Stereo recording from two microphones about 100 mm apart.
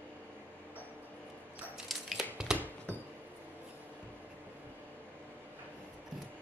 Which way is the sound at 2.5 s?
15° left (ahead or behind).